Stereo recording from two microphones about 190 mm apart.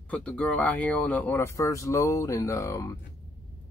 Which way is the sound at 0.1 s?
5° left (ahead or behind).